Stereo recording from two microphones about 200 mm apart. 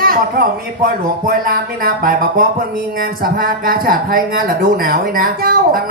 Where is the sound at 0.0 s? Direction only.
45° right (ahead or behind).